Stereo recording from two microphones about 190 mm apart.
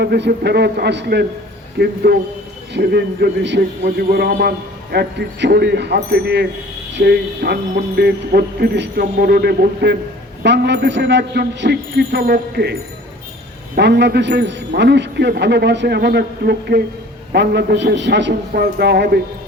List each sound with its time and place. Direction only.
0.0 s a man's voice: 60° right (ahead or behind)
13.7 s a man's voice: 60° right (ahead or behind)